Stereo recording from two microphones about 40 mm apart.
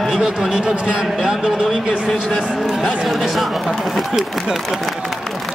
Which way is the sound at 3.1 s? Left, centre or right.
Centre.